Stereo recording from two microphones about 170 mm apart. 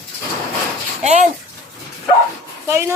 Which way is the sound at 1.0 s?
45° right (ahead or behind).